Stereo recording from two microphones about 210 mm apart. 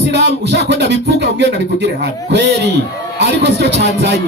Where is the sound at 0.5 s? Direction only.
55° right (ahead or behind).